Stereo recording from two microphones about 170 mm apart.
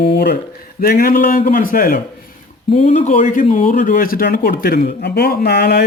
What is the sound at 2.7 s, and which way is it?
Speech, 40° left (ahead or behind).